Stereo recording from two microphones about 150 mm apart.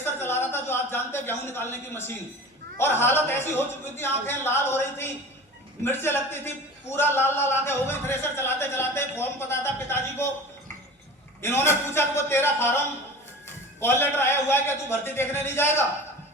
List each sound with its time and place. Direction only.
0.0 s a sound: 15° left (ahead or behind)
2.7 s speech: 15° left (ahead or behind)
11.4 s speech: 15° left (ahead or behind)
13.8 s speech: 15° left (ahead or behind)